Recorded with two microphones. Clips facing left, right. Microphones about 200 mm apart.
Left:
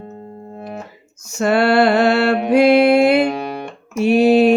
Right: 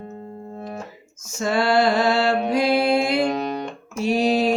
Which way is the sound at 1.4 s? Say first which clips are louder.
Left 5 dB; 65° left (ahead or behind).